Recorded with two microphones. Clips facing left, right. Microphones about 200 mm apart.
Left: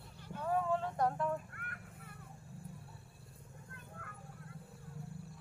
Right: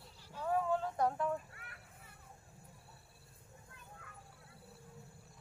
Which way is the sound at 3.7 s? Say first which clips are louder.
Left 4 dB; 55° left (ahead or behind).